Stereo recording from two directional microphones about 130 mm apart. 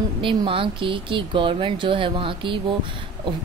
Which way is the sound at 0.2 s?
40° right (ahead or behind).